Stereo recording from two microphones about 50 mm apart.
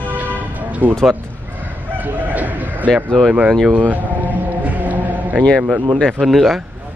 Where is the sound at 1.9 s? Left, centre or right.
Right.